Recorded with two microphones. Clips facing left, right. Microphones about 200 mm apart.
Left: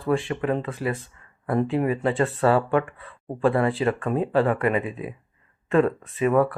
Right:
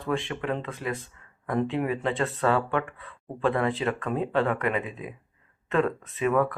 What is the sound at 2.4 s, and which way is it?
Speech, 35° left (ahead or behind).